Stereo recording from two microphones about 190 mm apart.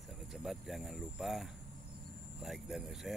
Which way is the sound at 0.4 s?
Centre (ahead or behind).